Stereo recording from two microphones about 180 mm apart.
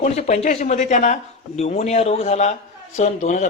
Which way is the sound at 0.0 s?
40° left (ahead or behind).